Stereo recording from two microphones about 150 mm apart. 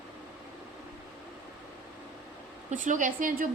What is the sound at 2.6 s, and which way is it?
Speech, 60° right (ahead or behind).